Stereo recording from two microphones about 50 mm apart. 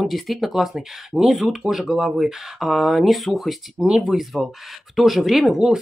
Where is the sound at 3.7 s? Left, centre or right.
Centre.